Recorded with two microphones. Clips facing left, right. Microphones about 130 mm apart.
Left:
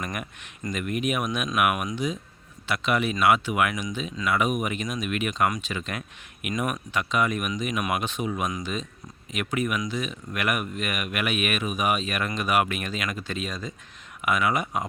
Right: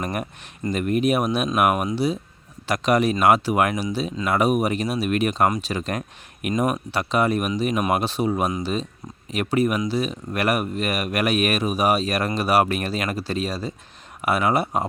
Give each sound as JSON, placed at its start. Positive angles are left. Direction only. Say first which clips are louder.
{"t": 0.0, "sound": "speech", "louder": "right 6 dB", "side_deg": -35}